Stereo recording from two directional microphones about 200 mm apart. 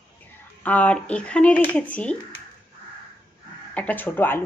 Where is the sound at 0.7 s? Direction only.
5° left (ahead or behind).